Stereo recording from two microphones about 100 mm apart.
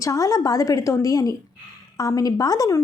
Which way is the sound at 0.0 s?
35° left (ahead or behind).